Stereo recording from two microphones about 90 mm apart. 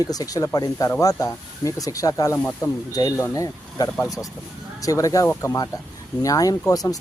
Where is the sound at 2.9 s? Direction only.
40° left (ahead or behind).